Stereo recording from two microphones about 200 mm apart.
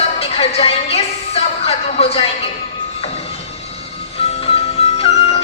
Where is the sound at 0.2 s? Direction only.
30° left (ahead or behind).